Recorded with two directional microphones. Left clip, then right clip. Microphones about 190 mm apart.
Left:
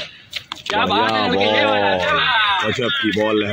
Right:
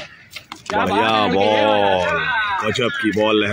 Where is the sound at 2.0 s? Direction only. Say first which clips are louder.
Left 3 dB; 25° right (ahead or behind).